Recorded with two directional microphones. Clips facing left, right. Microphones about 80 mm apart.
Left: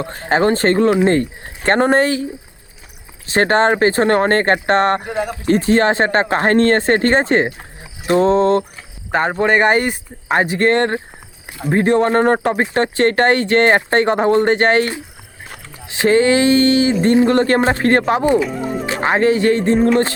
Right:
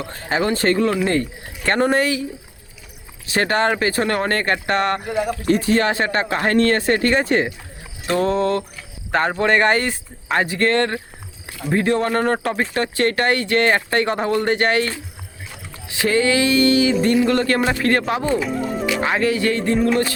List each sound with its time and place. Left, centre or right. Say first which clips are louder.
0.0 s speech: left 6 dB; left
3.2 s speech: left 5 dB; left
18.3 s speech: left 3 dB; centre
18.9 s speech: left 5 dB; left